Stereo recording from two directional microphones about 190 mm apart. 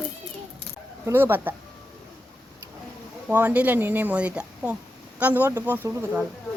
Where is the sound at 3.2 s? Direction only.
10° right (ahead or behind).